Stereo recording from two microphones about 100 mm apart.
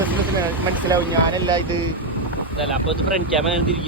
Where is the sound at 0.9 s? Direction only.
35° right (ahead or behind).